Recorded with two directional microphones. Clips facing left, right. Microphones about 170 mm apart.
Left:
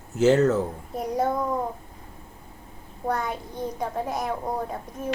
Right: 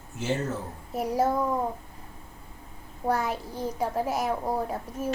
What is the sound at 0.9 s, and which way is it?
Speech, 5° right (ahead or behind).